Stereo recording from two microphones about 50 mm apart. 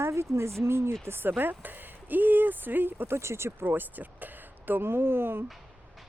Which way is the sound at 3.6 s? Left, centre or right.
Right.